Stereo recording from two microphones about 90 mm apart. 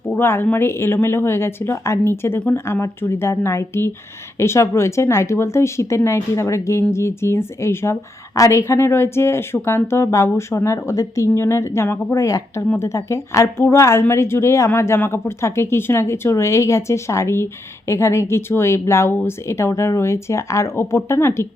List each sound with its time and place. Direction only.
0.1 s a woman's voice: 25° left (ahead or behind)